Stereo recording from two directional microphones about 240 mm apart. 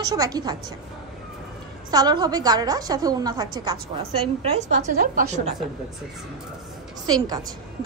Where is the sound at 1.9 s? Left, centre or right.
Centre.